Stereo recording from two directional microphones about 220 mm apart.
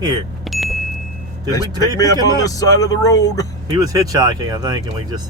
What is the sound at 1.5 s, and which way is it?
Speech, 15° left (ahead or behind).